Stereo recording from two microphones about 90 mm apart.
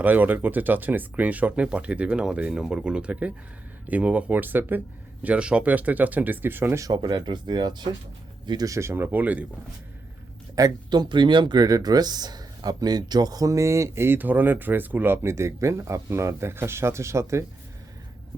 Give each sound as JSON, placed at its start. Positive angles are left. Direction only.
{"t": 0.0, "sound": "speech", "side_deg": -20}
{"t": 6.8, "sound": "speech", "side_deg": -50}
{"t": 8.7, "sound": "speech", "side_deg": -30}
{"t": 10.5, "sound": "speech", "side_deg": -50}